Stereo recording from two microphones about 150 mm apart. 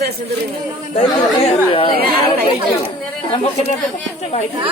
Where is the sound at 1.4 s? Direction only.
40° left (ahead or behind).